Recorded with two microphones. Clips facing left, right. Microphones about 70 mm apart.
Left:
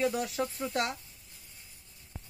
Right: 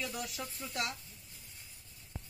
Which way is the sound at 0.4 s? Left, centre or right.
Left.